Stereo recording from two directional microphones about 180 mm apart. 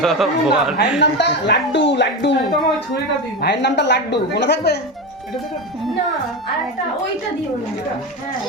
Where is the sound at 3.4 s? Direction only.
75° left (ahead or behind).